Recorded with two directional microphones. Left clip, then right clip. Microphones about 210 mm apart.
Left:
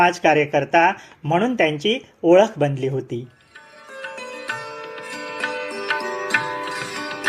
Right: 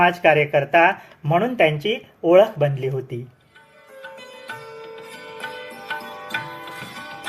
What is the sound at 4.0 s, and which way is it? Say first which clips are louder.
Music: left 6 dB; 45° left (ahead or behind).